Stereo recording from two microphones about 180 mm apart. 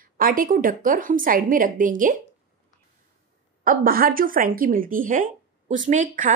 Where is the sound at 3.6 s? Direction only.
50° right (ahead or behind).